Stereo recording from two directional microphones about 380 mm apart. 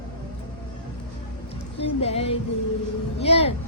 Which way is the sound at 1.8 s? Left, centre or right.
Centre.